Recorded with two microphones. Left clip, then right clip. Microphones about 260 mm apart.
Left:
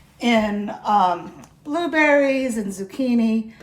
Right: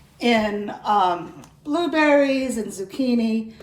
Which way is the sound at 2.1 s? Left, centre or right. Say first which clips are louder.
Even; left.